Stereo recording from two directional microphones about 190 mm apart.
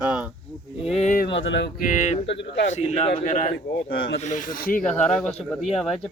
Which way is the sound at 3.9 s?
80° left.